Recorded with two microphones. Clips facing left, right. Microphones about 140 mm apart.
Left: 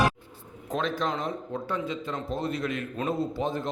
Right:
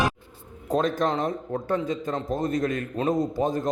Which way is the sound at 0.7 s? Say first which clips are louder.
Right 5 dB; 45° right (ahead or behind).